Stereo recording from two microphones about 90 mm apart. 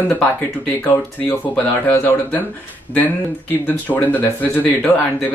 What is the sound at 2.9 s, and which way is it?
Speech, 20° left (ahead or behind).